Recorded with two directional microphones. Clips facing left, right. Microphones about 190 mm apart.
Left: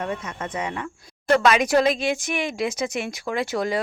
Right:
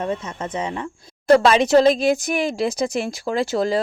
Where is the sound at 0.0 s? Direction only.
25° right (ahead or behind).